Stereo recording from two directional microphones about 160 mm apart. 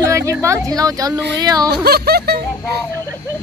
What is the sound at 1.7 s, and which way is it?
Speech, 80° right.